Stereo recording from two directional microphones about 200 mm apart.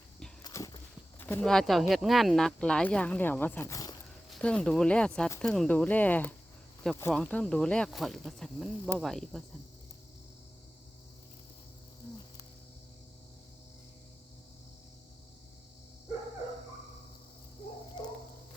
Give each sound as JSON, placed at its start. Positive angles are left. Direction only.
{"t": 0.4, "sound": "walk", "side_deg": 20}
{"t": 1.2, "sound": "speech", "side_deg": 10}
{"t": 4.3, "sound": "speech", "side_deg": 5}
{"t": 18.0, "sound": "turkey", "side_deg": 20}